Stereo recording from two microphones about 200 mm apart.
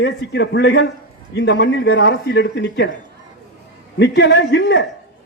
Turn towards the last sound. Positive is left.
turn(degrees=65)  # may be behind; listen again after turning